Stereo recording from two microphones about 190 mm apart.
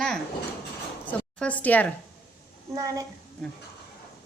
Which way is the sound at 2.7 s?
15° right (ahead or behind).